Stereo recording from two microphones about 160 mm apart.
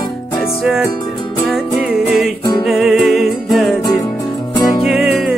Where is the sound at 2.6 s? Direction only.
Centre (ahead or behind).